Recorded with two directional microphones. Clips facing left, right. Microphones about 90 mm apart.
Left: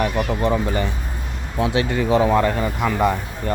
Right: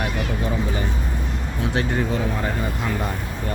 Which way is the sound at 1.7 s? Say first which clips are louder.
Left 5 dB; 90° left.